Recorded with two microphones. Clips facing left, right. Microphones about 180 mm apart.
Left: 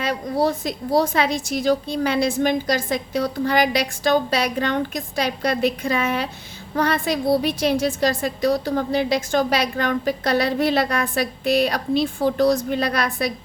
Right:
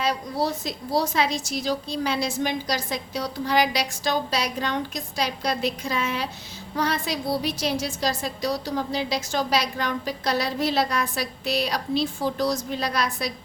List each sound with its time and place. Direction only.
0.0 s a woman's voice: 55° left (ahead or behind)